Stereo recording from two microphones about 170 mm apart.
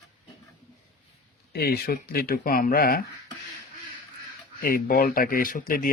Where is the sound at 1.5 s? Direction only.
70° left (ahead or behind).